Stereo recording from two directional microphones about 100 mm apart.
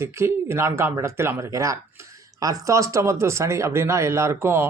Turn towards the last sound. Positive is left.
turn(degrees=-25)  # may be behind; listen again after turning